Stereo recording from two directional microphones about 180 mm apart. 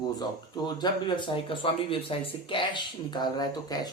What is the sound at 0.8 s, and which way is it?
Speech, 25° left (ahead or behind).